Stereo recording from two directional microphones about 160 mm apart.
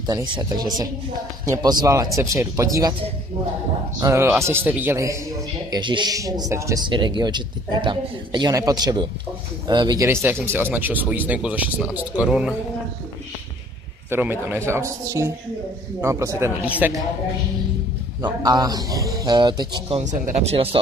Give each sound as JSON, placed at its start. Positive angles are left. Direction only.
{"t": 0.0, "sound": "speech", "side_deg": -25}
{"t": 4.0, "sound": "speech", "side_deg": -15}
{"t": 5.7, "sound": "speech", "side_deg": -30}
{"t": 10.0, "sound": "speech", "side_deg": -15}
{"t": 14.1, "sound": "speech", "side_deg": -15}
{"t": 18.2, "sound": "speech", "side_deg": -25}
{"t": 20.0, "sound": "speech", "side_deg": -50}